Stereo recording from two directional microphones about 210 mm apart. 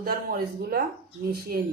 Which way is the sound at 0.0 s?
45° right (ahead or behind).